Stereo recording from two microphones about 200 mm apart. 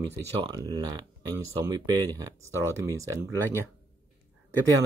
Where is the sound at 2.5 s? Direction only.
15° left (ahead or behind).